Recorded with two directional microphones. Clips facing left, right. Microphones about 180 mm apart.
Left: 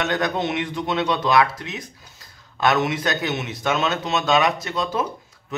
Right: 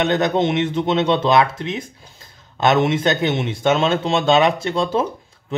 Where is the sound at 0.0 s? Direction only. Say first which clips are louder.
Right 6 dB; 25° right (ahead or behind).